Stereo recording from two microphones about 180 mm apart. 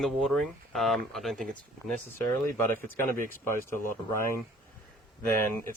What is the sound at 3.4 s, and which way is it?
Speech, 15° left (ahead or behind).